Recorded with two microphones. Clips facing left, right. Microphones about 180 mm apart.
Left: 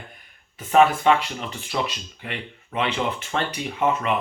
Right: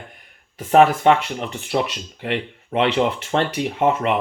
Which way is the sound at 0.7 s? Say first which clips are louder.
Right 3 dB; 65° right (ahead or behind).